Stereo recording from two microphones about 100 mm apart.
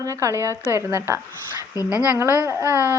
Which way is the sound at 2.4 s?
20° right (ahead or behind).